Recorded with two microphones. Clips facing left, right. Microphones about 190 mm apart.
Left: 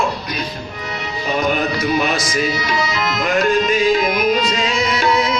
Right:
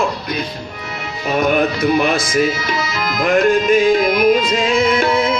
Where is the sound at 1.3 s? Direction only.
55° right (ahead or behind).